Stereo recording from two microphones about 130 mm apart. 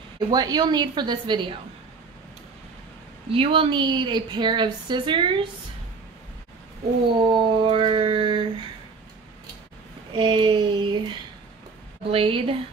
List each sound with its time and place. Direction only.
0.3 s speech: 30° right (ahead or behind)
3.3 s speech: 45° right (ahead or behind)
7.2 s speech: 35° right (ahead or behind)
10.1 s speech: 40° right (ahead or behind)
12.1 s a woman's voice: 45° right (ahead or behind)